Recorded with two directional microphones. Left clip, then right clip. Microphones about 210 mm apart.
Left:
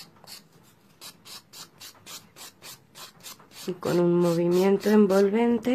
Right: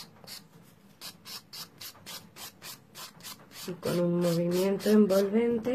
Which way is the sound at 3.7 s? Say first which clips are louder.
Left 6 dB; 40° left (ahead or behind).